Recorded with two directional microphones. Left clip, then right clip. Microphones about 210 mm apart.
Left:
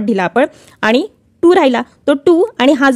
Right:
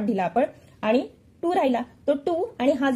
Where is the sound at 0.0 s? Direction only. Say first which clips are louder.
Left 10 dB; 40° left (ahead or behind).